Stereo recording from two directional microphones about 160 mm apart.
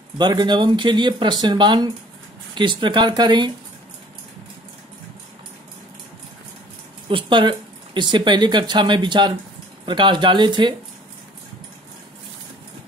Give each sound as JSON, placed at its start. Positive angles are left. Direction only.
{"t": 0.2, "sound": "speech", "side_deg": -25}
{"t": 7.1, "sound": "speech", "side_deg": -30}